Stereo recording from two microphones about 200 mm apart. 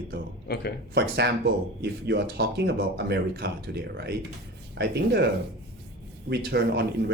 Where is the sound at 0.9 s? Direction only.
55° right (ahead or behind).